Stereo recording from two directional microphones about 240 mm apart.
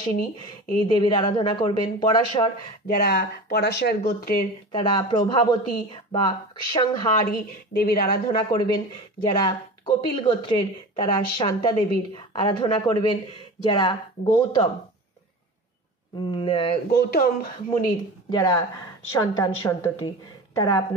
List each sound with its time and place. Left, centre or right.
0.8 s a woman's voice: centre
2.9 s a woman's voice: left
4.7 s a woman's voice: centre
7.2 s a woman's voice: left
8.5 s a woman's voice: left
16.2 s a woman's voice: centre
16.9 s a woman's voice: left
18.3 s a woman's voice: centre